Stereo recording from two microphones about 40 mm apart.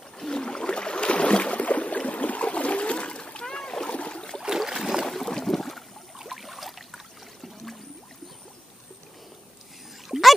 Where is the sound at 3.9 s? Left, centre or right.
Left.